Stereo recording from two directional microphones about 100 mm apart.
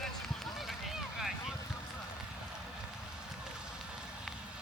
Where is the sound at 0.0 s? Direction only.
Centre (ahead or behind).